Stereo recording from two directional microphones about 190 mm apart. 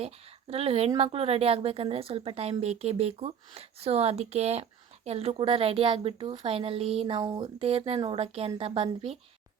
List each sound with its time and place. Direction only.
0.5 s a woman's voice: 30° right (ahead or behind)